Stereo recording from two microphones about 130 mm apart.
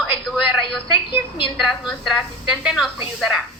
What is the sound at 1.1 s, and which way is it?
Speech, 45° left (ahead or behind).